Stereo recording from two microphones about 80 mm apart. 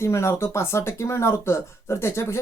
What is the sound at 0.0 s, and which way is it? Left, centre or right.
Speech, left.